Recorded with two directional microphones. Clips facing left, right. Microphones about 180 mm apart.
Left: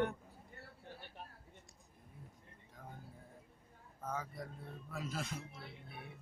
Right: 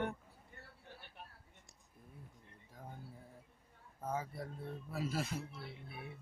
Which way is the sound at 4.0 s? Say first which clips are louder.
Right 2 dB; 30° right (ahead or behind).